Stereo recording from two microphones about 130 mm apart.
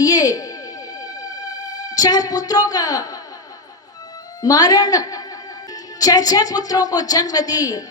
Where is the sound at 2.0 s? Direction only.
30° left (ahead or behind).